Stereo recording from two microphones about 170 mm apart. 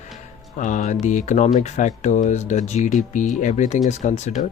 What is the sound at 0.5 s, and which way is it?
Speech, 45° left (ahead or behind).